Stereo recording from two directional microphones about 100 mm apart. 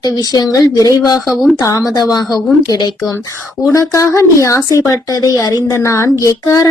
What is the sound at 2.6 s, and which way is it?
A woman's voice, 40° left (ahead or behind).